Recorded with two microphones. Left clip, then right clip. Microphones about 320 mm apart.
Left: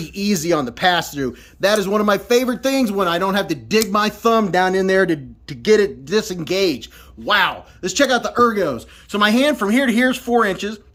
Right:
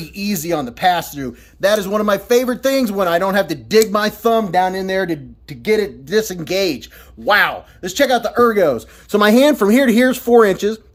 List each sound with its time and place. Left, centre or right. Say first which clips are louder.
0.0 s a man's voice: left 2 dB; centre